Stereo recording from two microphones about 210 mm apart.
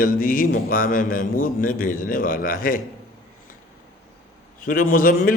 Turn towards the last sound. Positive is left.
turn(degrees=40)  # may be behind; listen again after turning